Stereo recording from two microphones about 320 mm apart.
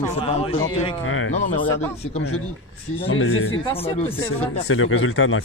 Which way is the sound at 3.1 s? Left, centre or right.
Left.